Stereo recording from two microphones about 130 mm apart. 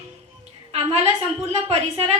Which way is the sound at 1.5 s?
50° right (ahead or behind).